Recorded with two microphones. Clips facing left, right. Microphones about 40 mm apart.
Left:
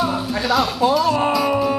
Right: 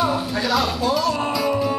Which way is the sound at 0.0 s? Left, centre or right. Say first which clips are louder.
Even; centre.